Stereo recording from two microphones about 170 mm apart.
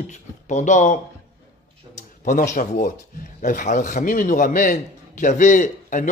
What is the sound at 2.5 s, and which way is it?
A man's voice, 50° left (ahead or behind).